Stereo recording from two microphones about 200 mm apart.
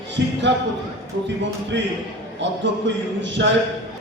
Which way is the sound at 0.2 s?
60° right (ahead or behind).